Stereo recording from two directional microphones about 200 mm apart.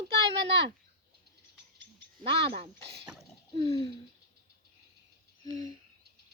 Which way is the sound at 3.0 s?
5° right (ahead or behind).